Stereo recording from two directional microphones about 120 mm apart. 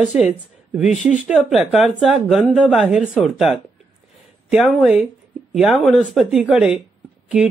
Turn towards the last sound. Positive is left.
turn(degrees=-5)  # may be behind; listen again after turning